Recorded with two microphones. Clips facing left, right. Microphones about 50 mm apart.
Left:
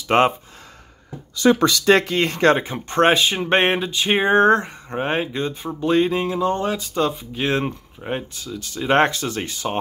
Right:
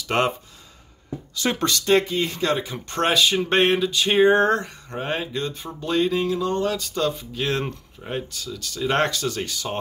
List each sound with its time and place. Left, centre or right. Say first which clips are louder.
0.1 s speech: left 6 dB; left
2.0 s speech: left 2 dB; left
2.2 s speech: left 7 dB; left
2.6 s speech: left 6 dB; left